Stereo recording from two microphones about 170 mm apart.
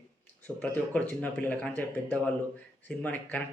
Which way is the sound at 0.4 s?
10° left (ahead or behind).